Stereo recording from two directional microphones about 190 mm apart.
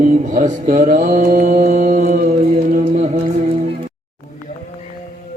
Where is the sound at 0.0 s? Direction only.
40° right (ahead or behind).